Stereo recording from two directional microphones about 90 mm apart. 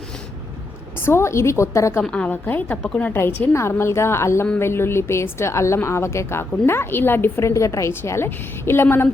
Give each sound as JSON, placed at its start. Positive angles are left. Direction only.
{"t": 1.0, "sound": "a woman's voice", "side_deg": 30}
{"t": 2.0, "sound": "a woman's voice", "side_deg": 10}